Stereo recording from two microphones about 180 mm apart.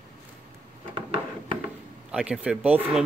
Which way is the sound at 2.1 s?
5° right (ahead or behind).